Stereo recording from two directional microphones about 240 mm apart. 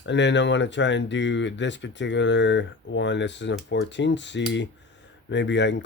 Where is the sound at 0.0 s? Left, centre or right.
Left.